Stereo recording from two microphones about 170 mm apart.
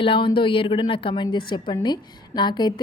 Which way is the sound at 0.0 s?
30° left (ahead or behind).